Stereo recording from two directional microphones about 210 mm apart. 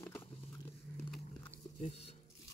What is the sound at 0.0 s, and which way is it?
Biting, 10° left (ahead or behind).